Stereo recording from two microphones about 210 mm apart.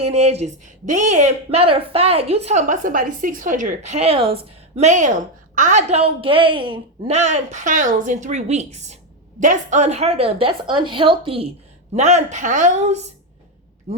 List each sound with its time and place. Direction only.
0.0 s a woman's voice: 30° right (ahead or behind)